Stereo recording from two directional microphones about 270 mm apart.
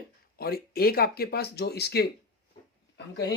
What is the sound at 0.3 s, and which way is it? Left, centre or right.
Speech, left.